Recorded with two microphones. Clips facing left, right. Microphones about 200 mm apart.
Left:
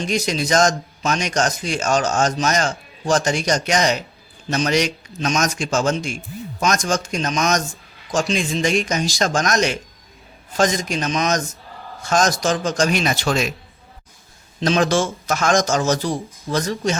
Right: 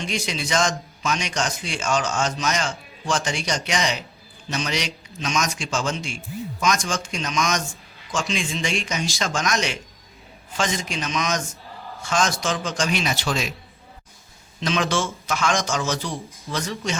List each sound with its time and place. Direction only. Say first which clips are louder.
0.0 s a man's voice: left 6 dB; 40° left (ahead or behind)
14.6 s speech: left 6 dB; 40° left (ahead or behind)